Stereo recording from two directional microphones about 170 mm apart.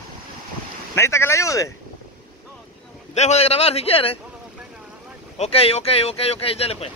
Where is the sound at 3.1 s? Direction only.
40° left (ahead or behind).